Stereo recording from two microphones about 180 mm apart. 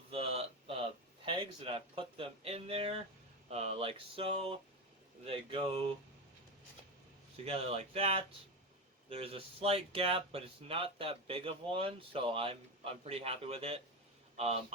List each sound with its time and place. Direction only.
0.1 s a sound: 35° right (ahead or behind)
3.5 s speech: 35° right (ahead or behind)
7.4 s speech: 35° right (ahead or behind)